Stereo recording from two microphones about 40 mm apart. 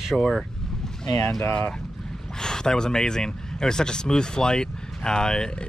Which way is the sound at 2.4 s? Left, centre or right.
Centre.